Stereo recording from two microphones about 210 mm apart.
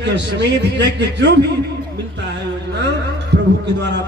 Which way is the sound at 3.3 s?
55° right (ahead or behind).